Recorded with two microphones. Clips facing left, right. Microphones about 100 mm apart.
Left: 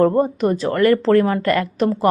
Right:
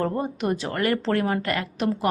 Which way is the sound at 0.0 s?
40° left (ahead or behind).